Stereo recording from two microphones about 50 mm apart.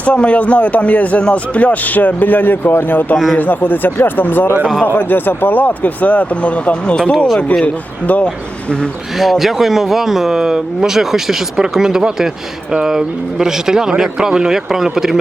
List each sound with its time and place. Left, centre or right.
0.0 s speech: left
9.1 s speech: centre